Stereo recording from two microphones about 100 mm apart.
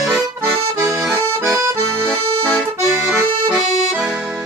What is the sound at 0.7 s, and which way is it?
Accordion, 35° right (ahead or behind).